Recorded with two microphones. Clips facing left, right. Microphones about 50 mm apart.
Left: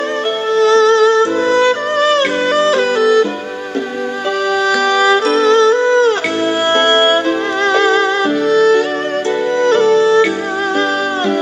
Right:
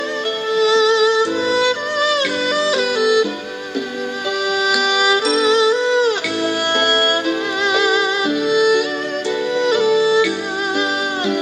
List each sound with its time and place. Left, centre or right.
0.6 s music: left
4.6 s music: left